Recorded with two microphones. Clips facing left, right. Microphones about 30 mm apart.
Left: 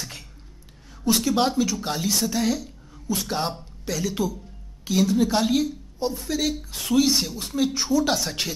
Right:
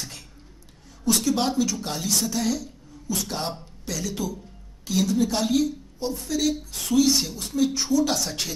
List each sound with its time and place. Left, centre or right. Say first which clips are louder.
1.0 s a woman's voice: left 2 dB; left